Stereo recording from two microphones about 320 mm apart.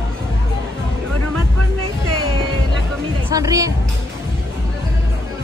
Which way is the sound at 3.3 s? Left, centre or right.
Centre.